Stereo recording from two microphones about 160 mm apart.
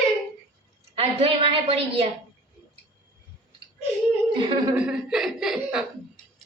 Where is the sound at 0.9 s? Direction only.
40° right (ahead or behind).